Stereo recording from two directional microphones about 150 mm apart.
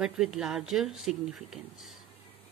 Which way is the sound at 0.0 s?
5° right (ahead or behind).